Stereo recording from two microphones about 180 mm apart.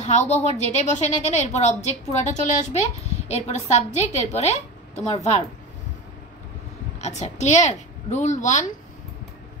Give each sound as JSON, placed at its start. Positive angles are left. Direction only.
{"t": 0.3, "sound": "a woman's voice", "side_deg": 40}
{"t": 7.0, "sound": "a woman's voice", "side_deg": 40}